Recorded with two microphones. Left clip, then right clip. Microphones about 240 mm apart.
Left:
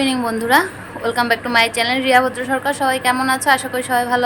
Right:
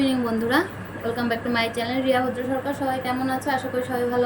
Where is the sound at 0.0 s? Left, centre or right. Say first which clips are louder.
Left 4 dB; centre.